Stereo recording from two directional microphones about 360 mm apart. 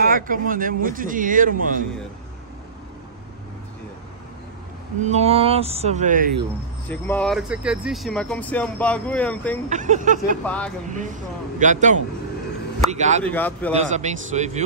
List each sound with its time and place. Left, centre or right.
0.0 s speech: right
5.0 s speech: centre
6.9 s speech: centre
9.7 s speech: right
10.4 s speech: centre
10.9 s speech: right
13.2 s speech: centre
13.9 s speech: centre